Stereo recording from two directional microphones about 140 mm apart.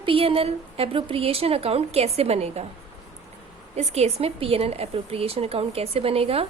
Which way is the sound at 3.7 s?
50° right (ahead or behind).